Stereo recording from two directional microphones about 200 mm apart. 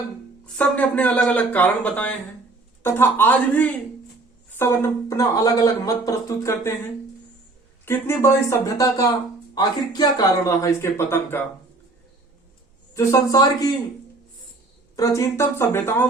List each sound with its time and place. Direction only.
0.4 s speech: 5° left (ahead or behind)
7.9 s speech: 10° left (ahead or behind)
12.9 s speech: 15° left (ahead or behind)
14.9 s speech: 15° left (ahead or behind)